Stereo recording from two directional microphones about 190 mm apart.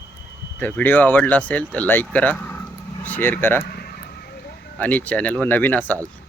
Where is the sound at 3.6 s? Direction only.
55° left (ahead or behind).